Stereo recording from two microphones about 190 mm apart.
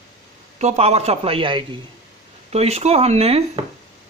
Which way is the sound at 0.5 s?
35° right (ahead or behind).